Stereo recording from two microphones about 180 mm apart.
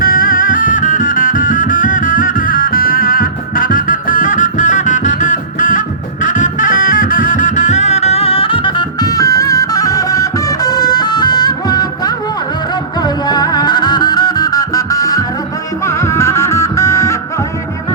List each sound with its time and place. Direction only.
0.0 s music: 50° left (ahead or behind); by 12.1 s 20° left (ahead or behind)
13.2 s music: 20° left (ahead or behind)